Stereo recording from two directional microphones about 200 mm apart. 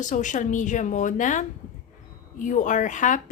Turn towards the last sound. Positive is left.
turn(degrees=40)  # may be behind; listen again after turning